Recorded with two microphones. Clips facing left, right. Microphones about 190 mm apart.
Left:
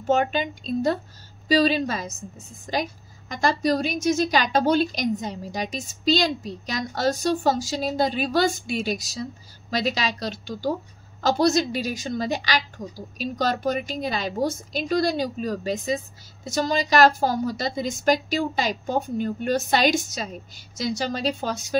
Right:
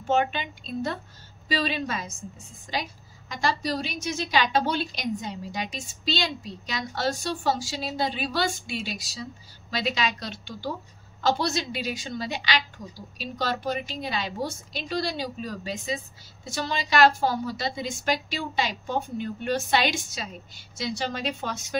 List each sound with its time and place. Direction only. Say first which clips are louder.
0.1 s a woman's voice: left 3 dB; 40° left (ahead or behind)